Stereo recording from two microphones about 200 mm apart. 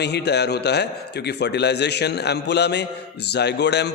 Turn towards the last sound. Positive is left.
turn(degrees=60)  # may be behind; listen again after turning